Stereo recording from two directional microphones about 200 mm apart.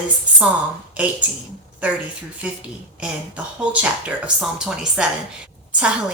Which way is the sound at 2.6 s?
5° right (ahead or behind).